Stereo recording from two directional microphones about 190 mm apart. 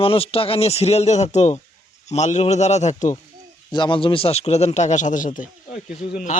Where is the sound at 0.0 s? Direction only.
30° left (ahead or behind).